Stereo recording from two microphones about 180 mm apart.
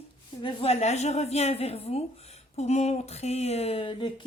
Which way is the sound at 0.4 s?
35° left (ahead or behind).